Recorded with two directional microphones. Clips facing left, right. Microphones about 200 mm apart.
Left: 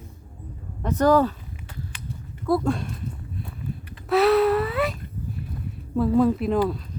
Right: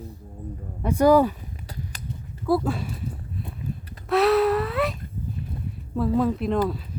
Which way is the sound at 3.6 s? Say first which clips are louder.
Even; 45° right (ahead or behind).